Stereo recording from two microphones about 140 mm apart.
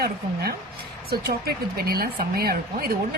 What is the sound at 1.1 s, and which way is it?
Speech, 90° right.